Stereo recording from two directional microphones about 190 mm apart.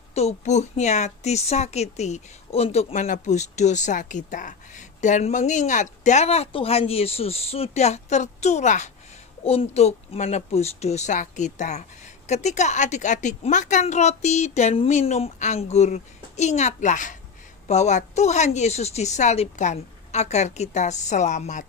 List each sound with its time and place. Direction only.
0.1 s a woman's voice: 35° left (ahead or behind)